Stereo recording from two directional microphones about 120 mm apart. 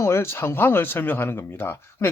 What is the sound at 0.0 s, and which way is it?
Speech, 20° left (ahead or behind).